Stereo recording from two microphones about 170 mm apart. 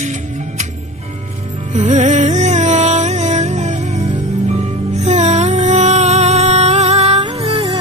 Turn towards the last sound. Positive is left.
turn(degrees=-30)  # may be behind; listen again after turning